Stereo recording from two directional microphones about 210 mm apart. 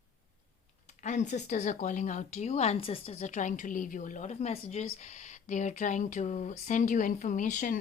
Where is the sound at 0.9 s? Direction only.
35° left (ahead or behind).